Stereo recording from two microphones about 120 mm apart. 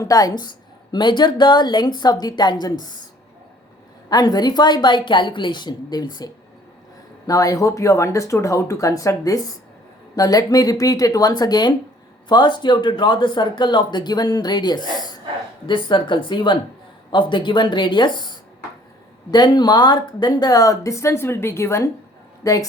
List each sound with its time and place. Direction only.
0.0 s a woman's voice: 30° left (ahead or behind)
4.1 s a woman's voice: 35° left (ahead or behind)